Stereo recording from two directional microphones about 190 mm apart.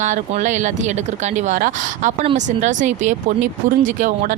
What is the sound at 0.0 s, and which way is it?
A woman's voice, 40° right (ahead or behind).